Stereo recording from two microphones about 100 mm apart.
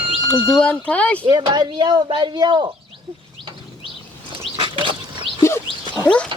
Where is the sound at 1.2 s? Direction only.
50° right (ahead or behind).